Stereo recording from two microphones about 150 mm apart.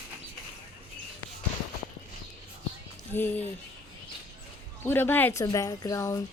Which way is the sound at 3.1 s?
15° left (ahead or behind).